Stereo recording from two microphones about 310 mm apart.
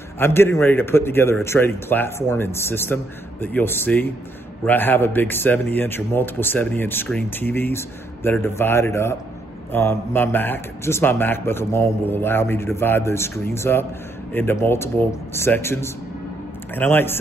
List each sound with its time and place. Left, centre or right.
0.2 s a man's voice: centre